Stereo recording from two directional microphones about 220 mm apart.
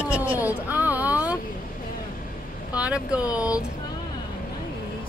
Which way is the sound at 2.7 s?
5° right (ahead or behind).